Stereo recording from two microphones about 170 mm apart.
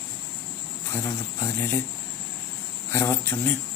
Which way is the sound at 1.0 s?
15° left (ahead or behind).